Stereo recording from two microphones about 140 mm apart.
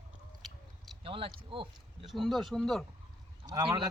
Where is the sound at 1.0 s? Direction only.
40° right (ahead or behind).